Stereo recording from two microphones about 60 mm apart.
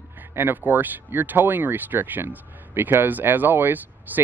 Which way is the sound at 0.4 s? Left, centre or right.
Right.